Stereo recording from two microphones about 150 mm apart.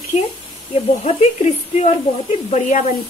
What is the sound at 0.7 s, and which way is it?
Speech, 45° left (ahead or behind).